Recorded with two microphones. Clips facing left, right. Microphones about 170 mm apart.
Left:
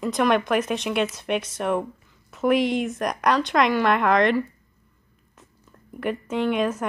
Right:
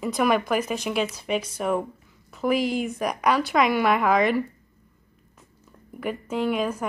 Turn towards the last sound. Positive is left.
turn(degrees=0)  # may be behind; listen again after turning